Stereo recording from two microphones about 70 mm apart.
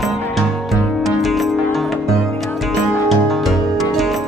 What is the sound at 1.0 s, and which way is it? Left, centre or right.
Music, centre.